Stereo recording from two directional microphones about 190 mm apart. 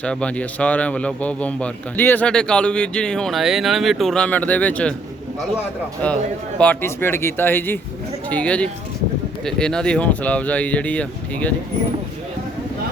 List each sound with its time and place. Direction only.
0.0 s a man's voice: 5° left (ahead or behind)
6.0 s speech: 10° left (ahead or behind)